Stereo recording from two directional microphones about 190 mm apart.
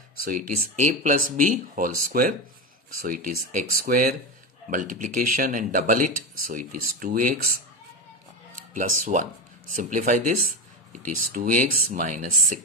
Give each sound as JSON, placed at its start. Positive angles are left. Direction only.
{"t": 0.7, "sound": "speech", "side_deg": -45}
{"t": 8.7, "sound": "speech", "side_deg": -45}